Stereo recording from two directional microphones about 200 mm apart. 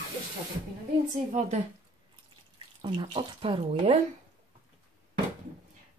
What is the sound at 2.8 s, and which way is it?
Speech, 25° right (ahead or behind).